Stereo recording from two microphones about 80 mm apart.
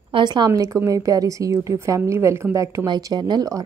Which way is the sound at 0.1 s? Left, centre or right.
Right.